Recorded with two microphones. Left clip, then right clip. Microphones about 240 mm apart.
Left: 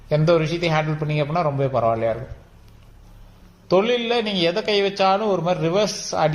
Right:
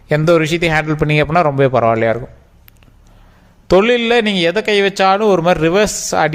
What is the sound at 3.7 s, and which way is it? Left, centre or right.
A man's voice, right.